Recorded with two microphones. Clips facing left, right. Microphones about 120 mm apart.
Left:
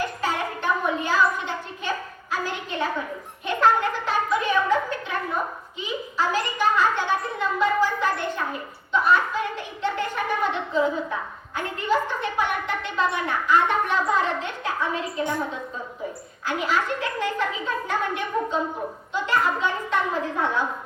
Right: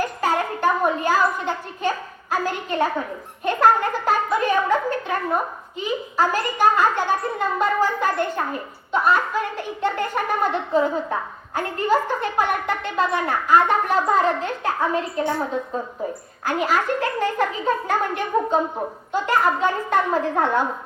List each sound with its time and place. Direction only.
0.0 s a sound: 45° right (ahead or behind)
5.8 s a woman's voice: 45° right (ahead or behind)
16.4 s a woman's voice: 45° right (ahead or behind)